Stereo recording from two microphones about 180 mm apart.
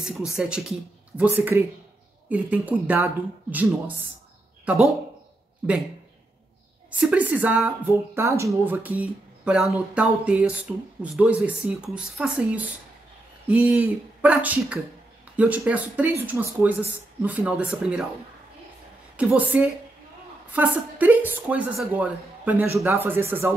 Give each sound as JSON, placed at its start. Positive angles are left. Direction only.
{"t": 0.0, "sound": "speech", "side_deg": -5}
{"t": 5.6, "sound": "speech", "side_deg": -5}
{"t": 6.9, "sound": "speech", "side_deg": -10}
{"t": 19.1, "sound": "speech", "side_deg": -10}